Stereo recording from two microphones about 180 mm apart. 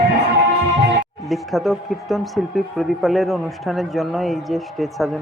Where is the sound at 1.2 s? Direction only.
Centre (ahead or behind).